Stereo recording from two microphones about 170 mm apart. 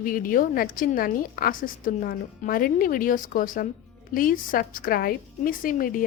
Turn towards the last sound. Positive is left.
turn(degrees=55)  # may be behind; listen again after turning